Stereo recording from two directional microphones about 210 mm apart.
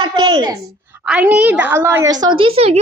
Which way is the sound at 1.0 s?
5° right (ahead or behind).